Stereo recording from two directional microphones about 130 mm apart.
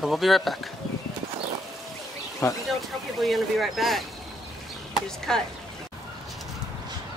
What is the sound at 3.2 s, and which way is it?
Speech, centre (ahead or behind).